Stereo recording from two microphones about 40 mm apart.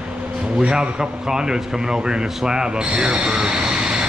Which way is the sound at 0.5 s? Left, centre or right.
Centre.